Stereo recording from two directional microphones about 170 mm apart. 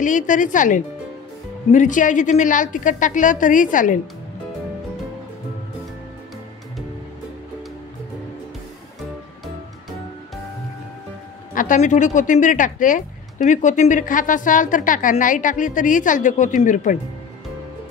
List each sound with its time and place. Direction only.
0.0 s speech: 50° left (ahead or behind)
11.5 s speech: 50° left (ahead or behind)